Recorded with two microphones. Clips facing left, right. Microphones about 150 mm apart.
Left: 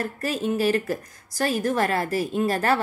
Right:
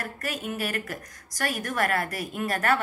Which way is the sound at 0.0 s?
30° left (ahead or behind).